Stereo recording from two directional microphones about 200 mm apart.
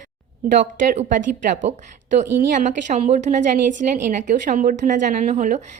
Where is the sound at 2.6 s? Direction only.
35° right (ahead or behind).